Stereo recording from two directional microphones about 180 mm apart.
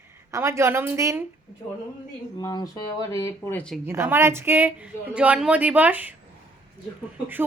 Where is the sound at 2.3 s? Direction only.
20° left (ahead or behind).